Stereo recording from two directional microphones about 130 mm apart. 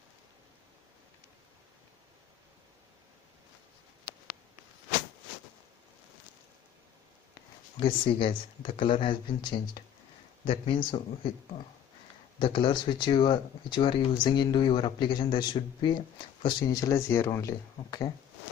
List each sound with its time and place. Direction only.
7.8 s speech: 45° left (ahead or behind); by 18.1 s 25° left (ahead or behind)